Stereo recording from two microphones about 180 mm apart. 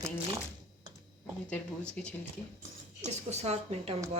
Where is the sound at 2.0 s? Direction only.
5° left (ahead or behind).